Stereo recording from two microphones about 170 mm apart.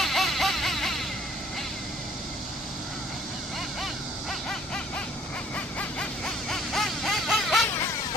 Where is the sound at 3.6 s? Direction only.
Centre (ahead or behind).